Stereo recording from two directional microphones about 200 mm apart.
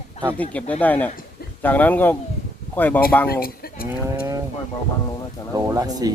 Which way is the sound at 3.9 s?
15° right (ahead or behind).